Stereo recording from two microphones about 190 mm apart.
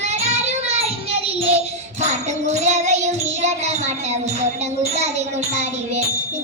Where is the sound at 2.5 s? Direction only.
35° right (ahead or behind).